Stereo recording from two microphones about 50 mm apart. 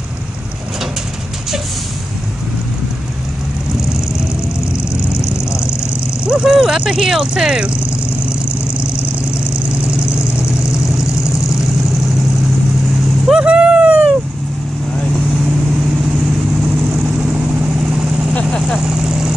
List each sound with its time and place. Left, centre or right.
5.8 s vehicle: centre
9.8 s vehicle: right
13.4 s a sound: right
18.3 s vehicle: centre
18.8 s vehicle: centre